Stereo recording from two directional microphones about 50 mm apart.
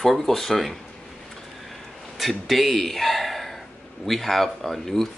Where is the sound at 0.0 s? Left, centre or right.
Centre.